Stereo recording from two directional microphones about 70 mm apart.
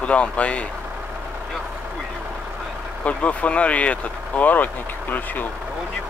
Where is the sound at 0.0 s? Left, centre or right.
Centre.